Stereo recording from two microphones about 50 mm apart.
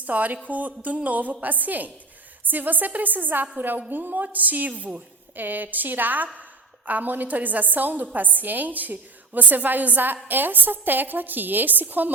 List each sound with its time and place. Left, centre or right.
0.0 s a woman's voice: right
4.7 s a woman's voice: right
5.4 s a woman's voice: right